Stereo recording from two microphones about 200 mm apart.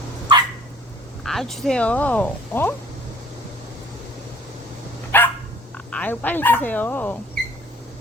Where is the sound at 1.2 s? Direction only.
Centre (ahead or behind).